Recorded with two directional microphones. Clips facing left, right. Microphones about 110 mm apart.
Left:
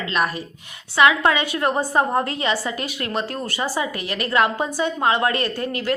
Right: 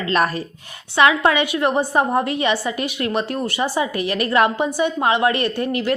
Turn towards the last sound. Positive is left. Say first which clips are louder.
# right 4 dB
turn(degrees=-20)  # may be behind; listen again after turning